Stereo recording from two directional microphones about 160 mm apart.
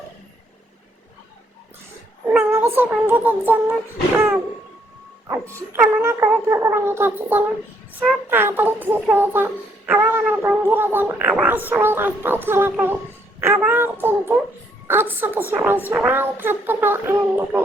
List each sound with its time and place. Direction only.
2.5 s a child's voice: 15° right (ahead or behind)
5.3 s a child's voice: 15° right (ahead or behind)
13.4 s child singing: 15° right (ahead or behind)
14.8 s a woman's voice: 15° right (ahead or behind)